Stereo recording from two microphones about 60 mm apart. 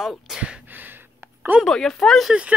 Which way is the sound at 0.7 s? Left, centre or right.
Right.